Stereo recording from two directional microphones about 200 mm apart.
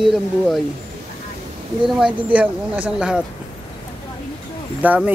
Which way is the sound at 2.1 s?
5° right (ahead or behind).